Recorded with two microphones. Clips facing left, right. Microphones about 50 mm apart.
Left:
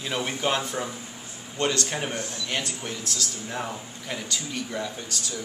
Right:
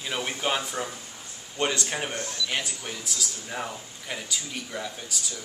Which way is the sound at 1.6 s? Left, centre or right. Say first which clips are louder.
Left 1 dB; centre.